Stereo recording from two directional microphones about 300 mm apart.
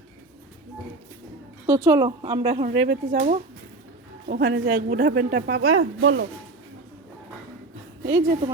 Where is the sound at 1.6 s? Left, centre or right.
Centre; by 6.2 s right.